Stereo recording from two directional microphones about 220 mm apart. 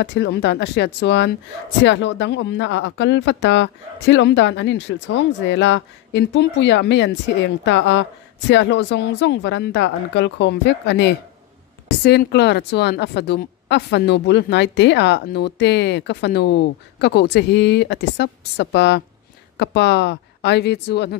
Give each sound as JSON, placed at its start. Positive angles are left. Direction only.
{"t": 0.0, "sound": "a woman's voice", "side_deg": 50}